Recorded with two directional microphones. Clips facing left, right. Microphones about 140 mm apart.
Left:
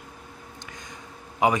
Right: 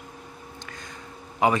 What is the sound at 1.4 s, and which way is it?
Speech, 15° left (ahead or behind).